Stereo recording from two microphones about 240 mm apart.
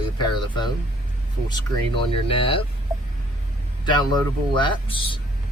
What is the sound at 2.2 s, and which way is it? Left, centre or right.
Speech, left.